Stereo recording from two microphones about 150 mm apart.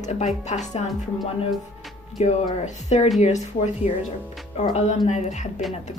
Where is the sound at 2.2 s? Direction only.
50° left (ahead or behind).